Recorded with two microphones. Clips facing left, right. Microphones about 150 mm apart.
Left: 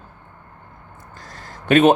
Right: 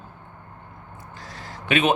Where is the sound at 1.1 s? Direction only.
45° left (ahead or behind).